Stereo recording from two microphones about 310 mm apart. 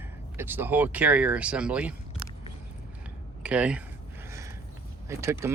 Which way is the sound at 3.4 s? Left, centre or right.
Centre.